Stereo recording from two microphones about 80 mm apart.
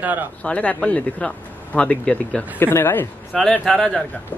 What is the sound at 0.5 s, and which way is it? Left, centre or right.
A man's voice, centre.